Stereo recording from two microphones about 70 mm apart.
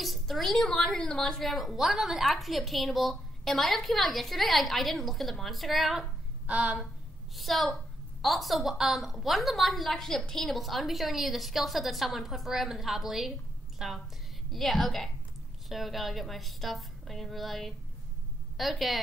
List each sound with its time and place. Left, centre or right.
0.0 s a woman's voice: centre
6.4 s speech: centre
7.3 s a woman's voice: centre